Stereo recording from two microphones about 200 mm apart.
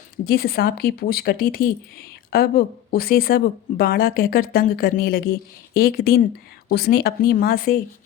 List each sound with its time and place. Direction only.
0.3 s speech: 50° left (ahead or behind)